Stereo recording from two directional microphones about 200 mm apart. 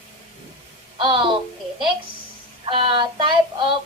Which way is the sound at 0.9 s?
25° right (ahead or behind).